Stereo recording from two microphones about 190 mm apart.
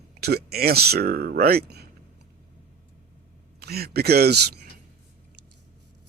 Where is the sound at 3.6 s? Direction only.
55° right (ahead or behind).